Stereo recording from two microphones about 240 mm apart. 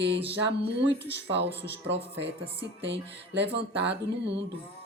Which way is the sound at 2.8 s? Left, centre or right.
Right.